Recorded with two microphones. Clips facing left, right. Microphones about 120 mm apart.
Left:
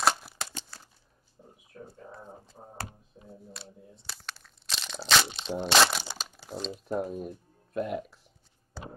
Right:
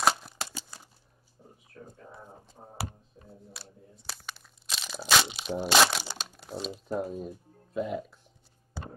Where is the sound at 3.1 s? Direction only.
30° left (ahead or behind).